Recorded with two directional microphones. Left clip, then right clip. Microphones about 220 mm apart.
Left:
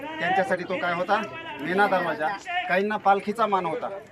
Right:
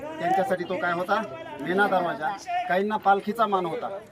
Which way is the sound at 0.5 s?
20° right (ahead or behind).